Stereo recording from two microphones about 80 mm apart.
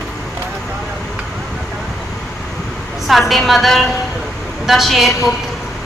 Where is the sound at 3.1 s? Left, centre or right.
Centre.